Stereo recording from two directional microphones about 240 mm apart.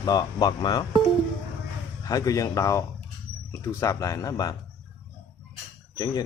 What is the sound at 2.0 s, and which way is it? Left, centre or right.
A man's voice, centre.